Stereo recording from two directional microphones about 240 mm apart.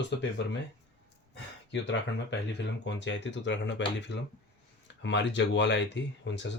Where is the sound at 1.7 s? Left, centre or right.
Left.